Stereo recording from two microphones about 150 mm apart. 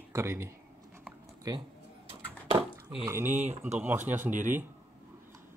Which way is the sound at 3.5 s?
50° right (ahead or behind).